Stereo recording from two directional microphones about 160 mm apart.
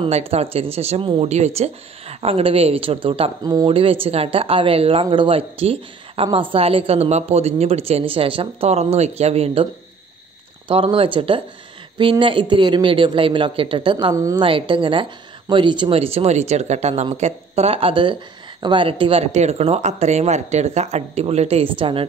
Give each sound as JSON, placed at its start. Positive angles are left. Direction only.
{"t": 0.0, "sound": "a woman's voice", "side_deg": -40}
{"t": 10.7, "sound": "a woman's voice", "side_deg": -35}
{"t": 14.1, "sound": "a woman's voice", "side_deg": -20}
{"t": 14.4, "sound": "a woman's voice", "side_deg": -30}